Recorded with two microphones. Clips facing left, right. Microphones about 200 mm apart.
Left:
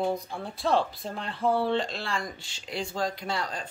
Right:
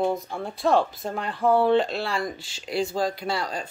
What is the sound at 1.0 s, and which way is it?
Speech, 45° right (ahead or behind).